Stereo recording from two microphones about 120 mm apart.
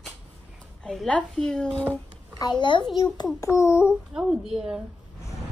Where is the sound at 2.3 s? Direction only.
40° left (ahead or behind).